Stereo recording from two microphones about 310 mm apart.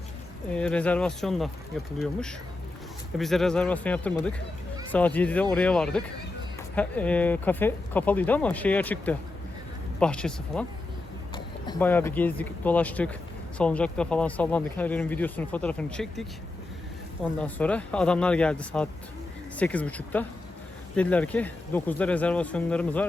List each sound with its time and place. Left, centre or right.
0.5 s speech: centre
17.2 s speech: centre